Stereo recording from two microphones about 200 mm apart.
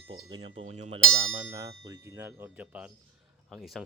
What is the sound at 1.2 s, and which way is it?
Speech, 85° right.